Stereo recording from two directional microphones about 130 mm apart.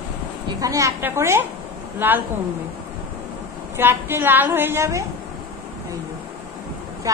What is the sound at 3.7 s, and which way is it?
A woman's voice, 20° right (ahead or behind).